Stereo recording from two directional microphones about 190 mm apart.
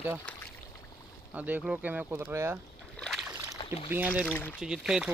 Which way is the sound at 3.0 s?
Centre (ahead or behind).